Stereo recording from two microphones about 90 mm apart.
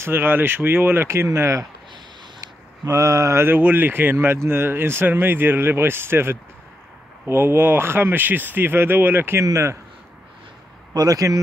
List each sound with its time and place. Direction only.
0.0 s speech: 25° right (ahead or behind)
10.9 s speech: 45° right (ahead or behind)